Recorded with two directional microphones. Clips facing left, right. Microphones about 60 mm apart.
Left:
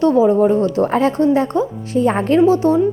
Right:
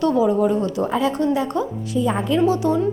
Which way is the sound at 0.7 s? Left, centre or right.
Left.